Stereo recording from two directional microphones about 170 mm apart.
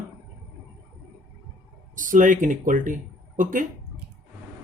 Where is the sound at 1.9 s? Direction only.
50° right (ahead or behind).